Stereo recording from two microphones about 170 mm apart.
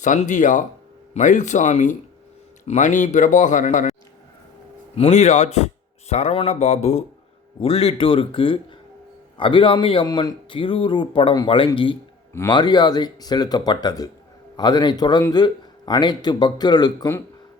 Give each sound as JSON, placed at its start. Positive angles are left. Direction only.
{"t": 0.0, "sound": "speech", "side_deg": 45}
{"t": 4.9, "sound": "a man's voice", "side_deg": 40}